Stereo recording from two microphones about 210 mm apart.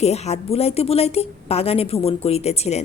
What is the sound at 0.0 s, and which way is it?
A woman's voice, 30° left (ahead or behind).